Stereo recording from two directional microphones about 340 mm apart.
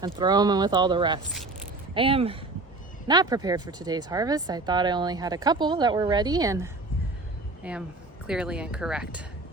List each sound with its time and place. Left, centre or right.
0.0 s speech: centre